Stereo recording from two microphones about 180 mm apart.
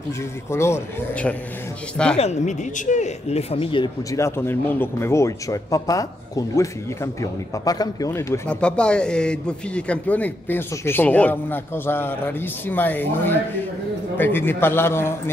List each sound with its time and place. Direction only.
0.5 s a man's voice: 15° left (ahead or behind)
2.1 s a man's voice: 40° left (ahead or behind); by 15.3 s 15° left (ahead or behind)